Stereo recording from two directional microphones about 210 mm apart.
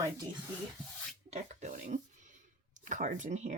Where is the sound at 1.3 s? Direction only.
35° right (ahead or behind).